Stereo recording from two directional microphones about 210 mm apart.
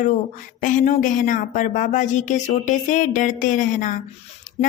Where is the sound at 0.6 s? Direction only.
35° left (ahead or behind).